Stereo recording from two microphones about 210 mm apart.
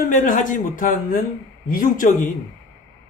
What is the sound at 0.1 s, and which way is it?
Speech, 40° left (ahead or behind).